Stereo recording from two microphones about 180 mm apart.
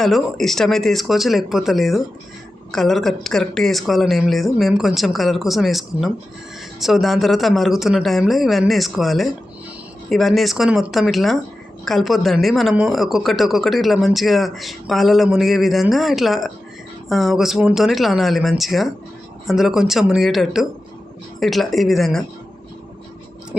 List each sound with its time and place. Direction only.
0.0 s speech: centre (ahead or behind)